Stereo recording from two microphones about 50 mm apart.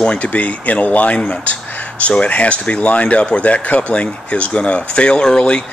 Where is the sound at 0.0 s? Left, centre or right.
Left.